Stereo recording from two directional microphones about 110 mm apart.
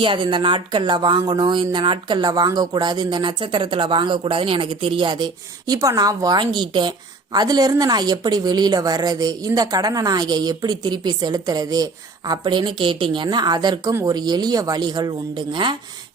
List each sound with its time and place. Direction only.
0.0 s a woman's voice: 50° right (ahead or behind)